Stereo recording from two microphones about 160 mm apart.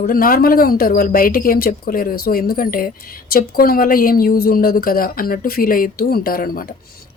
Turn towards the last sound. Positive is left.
turn(degrees=65)  # may be behind; listen again after turning